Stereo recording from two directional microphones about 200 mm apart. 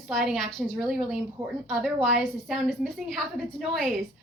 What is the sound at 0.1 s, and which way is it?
A woman's voice, centre (ahead or behind).